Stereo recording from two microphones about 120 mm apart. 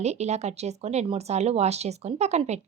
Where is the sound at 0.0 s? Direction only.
65° right (ahead or behind).